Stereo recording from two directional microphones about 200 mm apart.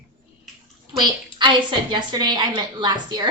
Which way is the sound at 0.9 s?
20° right (ahead or behind).